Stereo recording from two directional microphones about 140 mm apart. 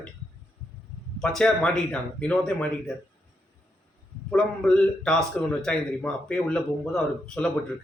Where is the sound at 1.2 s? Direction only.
5° left (ahead or behind).